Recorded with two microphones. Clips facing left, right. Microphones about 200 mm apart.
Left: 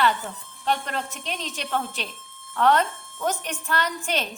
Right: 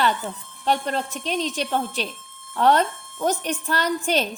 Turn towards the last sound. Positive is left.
turn(degrees=-35)  # may be behind; listen again after turning